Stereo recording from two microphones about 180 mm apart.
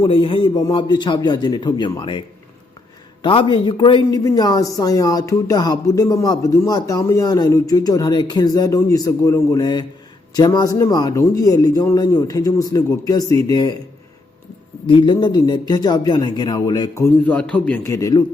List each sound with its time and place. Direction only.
0.0 s speech: 30° left (ahead or behind)
3.2 s speech: 30° left (ahead or behind)
14.8 s speech: 25° left (ahead or behind)